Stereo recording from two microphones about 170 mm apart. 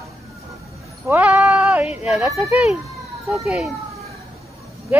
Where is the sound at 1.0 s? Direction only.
10° right (ahead or behind).